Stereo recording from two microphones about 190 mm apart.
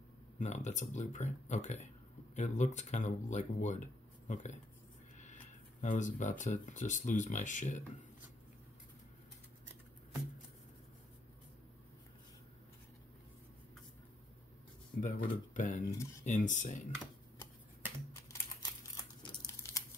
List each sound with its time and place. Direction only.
0.4 s speech: 40° left (ahead or behind)
15.0 s speech: 45° left (ahead or behind)
15.9 s speech: 15° left (ahead or behind)
16.3 s speech: 40° left (ahead or behind)
18.3 s crumpling: 20° left (ahead or behind)